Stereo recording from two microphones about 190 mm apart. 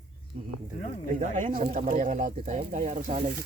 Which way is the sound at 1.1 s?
40° right (ahead or behind).